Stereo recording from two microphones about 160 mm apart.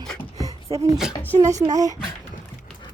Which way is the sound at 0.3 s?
20° right (ahead or behind).